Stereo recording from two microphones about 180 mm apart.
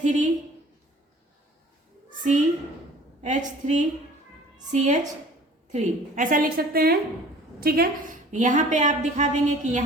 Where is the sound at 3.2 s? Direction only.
45° right (ahead or behind).